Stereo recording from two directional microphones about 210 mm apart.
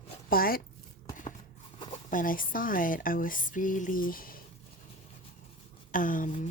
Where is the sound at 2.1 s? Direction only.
40° left (ahead or behind).